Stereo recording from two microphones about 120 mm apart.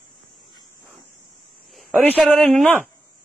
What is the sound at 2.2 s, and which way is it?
Speech, centre (ahead or behind).